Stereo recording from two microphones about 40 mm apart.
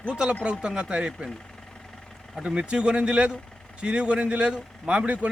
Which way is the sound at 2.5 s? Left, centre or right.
Right.